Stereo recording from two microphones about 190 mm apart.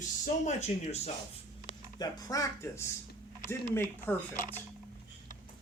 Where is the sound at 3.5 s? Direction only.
10° left (ahead or behind).